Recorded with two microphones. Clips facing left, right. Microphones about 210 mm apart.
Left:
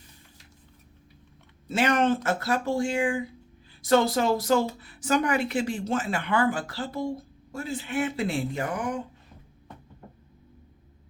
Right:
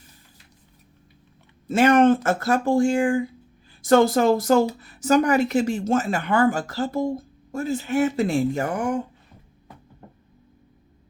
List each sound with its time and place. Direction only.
1.6 s speech: 50° right (ahead or behind)